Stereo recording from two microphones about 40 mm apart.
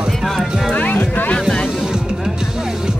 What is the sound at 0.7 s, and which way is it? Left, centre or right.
Music, left.